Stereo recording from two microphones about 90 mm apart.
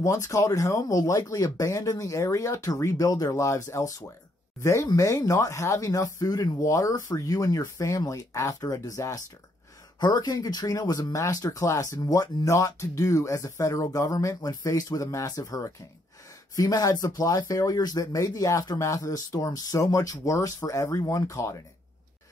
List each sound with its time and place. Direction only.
0.0 s speech: 35° left (ahead or behind)
9.9 s speech: 55° left (ahead or behind); by 21.5 s 35° left (ahead or behind)